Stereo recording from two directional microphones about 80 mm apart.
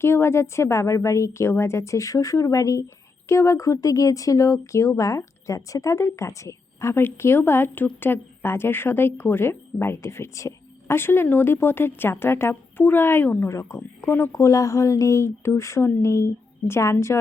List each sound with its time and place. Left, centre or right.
0.0 s a woman's voice: left
13.5 s speech: left
14.3 s speech: left